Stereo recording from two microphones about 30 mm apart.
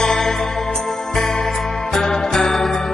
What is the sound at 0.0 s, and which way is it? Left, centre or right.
Music, centre.